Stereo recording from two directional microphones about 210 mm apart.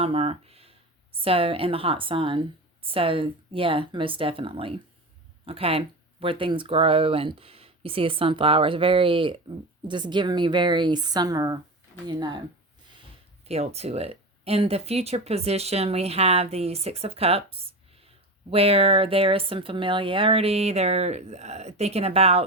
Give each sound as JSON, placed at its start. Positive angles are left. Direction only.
{"t": 0.0, "sound": "speech", "side_deg": -30}
{"t": 13.4, "sound": "speech", "side_deg": -30}